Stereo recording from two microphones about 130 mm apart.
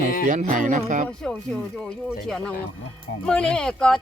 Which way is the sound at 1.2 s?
5° left (ahead or behind).